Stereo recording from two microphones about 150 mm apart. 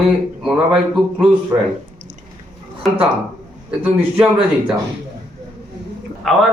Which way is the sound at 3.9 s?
5° right (ahead or behind).